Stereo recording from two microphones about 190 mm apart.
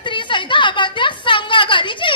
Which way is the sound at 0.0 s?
25° left (ahead or behind).